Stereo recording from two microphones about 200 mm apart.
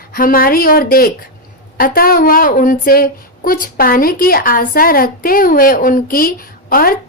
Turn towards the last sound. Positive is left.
turn(degrees=45)  # may be behind; listen again after turning